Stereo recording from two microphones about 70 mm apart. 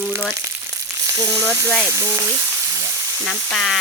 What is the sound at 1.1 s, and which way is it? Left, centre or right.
Speech, right.